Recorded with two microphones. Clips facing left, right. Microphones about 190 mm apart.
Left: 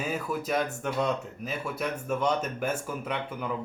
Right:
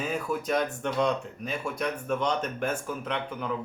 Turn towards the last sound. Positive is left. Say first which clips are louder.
# even
turn(degrees=5)  # may be behind; listen again after turning